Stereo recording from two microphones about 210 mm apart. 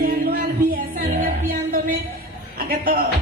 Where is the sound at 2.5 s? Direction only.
45° right (ahead or behind).